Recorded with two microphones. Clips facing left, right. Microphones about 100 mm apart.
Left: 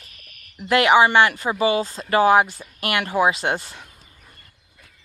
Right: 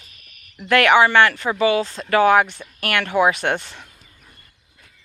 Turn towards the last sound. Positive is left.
turn(degrees=10)  # may be behind; listen again after turning